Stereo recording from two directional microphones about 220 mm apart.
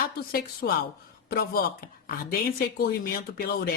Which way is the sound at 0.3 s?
45° left (ahead or behind).